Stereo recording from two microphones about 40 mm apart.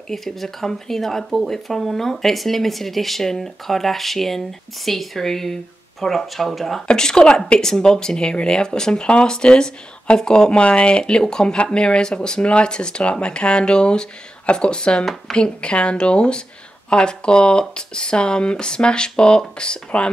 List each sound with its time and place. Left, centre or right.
0.1 s speech: centre
6.9 s speech: centre